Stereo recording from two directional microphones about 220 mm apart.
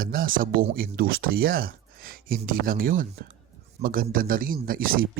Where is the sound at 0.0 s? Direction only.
40° right (ahead or behind).